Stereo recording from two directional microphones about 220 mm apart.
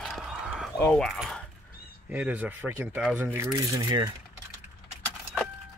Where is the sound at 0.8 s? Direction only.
5° left (ahead or behind).